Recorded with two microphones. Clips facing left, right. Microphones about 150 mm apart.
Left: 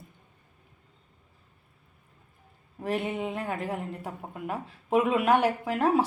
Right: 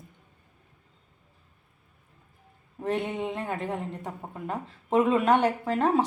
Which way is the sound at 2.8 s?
5° left (ahead or behind).